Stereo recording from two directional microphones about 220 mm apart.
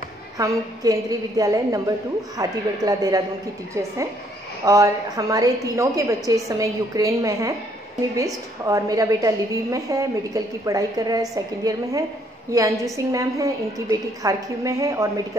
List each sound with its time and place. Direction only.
0.4 s a woman's voice: 15° right (ahead or behind)
4.6 s a woman's voice: 15° right (ahead or behind)
8.6 s a woman's voice: 15° right (ahead or behind)